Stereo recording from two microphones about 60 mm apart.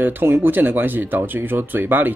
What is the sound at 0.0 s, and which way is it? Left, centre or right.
Speech, right.